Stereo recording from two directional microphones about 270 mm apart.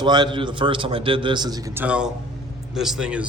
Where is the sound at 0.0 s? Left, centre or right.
Centre.